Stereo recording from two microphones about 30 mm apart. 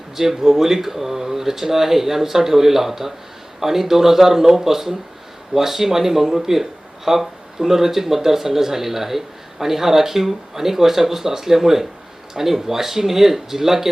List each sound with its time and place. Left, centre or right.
0.2 s speech: centre